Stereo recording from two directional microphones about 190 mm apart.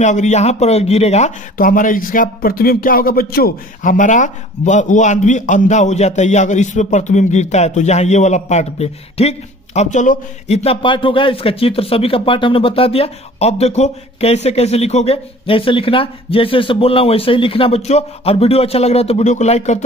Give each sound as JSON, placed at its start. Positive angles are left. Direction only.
{"t": 0.0, "sound": "a man's voice", "side_deg": 40}